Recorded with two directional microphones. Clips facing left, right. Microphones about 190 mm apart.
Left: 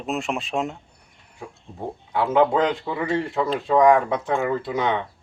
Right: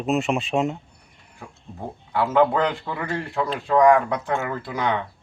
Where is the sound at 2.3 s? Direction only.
15° left (ahead or behind).